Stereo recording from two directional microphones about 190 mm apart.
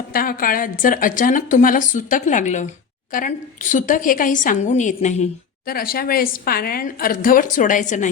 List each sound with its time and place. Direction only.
0.1 s a woman's voice: 50° left (ahead or behind)
5.6 s speech: 50° left (ahead or behind)